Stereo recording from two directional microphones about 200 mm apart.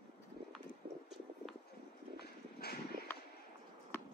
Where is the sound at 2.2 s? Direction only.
50° left (ahead or behind).